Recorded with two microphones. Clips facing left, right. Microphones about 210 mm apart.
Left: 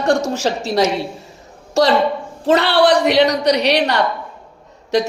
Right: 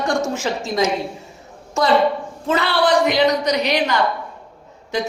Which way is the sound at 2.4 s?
70° left (ahead or behind).